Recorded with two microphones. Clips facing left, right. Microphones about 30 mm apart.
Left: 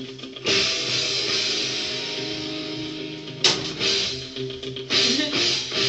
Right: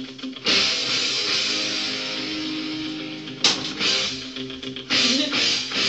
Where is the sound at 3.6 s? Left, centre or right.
Right.